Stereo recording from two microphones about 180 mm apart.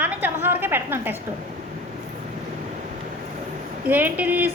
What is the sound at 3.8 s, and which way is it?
Speech, 10° right (ahead or behind).